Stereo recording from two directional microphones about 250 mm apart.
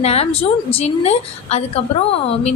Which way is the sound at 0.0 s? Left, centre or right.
Left.